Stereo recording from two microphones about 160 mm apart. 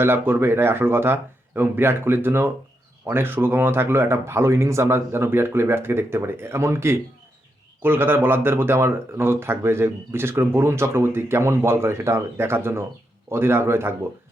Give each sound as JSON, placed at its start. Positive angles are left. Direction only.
{"t": 0.0, "sound": "speech", "side_deg": -15}